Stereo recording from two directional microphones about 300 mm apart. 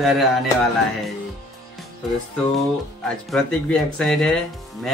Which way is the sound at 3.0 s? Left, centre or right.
Centre.